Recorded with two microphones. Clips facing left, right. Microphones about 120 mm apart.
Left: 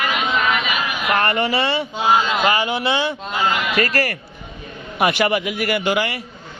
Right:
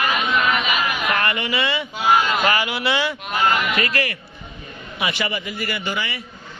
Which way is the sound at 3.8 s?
40° left (ahead or behind).